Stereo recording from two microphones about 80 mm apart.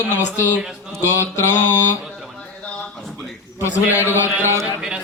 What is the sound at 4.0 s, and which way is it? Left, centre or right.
Mantra, left.